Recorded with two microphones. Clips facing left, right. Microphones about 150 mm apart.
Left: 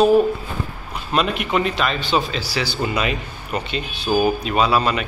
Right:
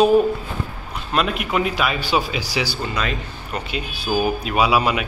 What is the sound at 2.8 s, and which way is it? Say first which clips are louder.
A man's voice: left 3 dB; 5° left (ahead or behind).